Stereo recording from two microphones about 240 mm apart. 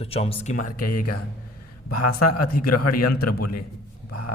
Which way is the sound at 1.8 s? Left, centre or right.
Left.